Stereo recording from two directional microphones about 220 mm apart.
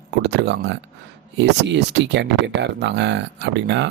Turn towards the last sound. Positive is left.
turn(degrees=-50)  # may be behind; listen again after turning